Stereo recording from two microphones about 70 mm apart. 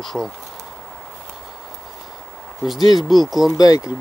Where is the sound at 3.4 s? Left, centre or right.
Left.